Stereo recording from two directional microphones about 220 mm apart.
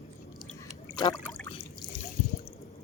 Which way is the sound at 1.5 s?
25° left (ahead or behind).